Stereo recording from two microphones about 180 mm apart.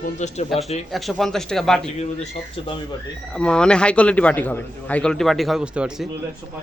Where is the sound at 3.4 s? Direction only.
5° left (ahead or behind).